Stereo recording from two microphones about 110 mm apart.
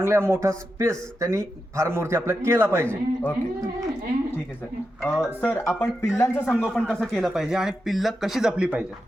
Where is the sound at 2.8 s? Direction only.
15° left (ahead or behind).